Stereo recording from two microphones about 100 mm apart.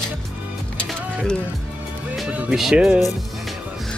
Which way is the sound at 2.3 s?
15° right (ahead or behind).